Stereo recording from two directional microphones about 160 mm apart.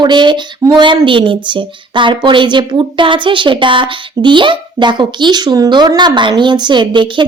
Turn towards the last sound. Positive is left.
turn(degrees=-30)  # may be behind; listen again after turning